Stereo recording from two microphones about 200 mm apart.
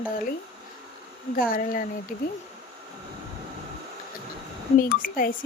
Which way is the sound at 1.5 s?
45° left (ahead or behind).